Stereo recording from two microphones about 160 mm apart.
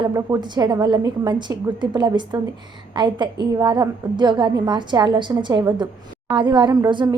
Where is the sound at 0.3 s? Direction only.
25° right (ahead or behind).